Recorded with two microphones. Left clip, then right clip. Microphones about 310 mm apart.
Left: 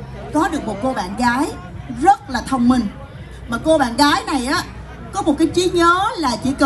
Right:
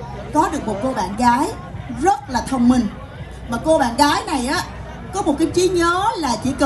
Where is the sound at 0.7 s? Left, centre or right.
Left.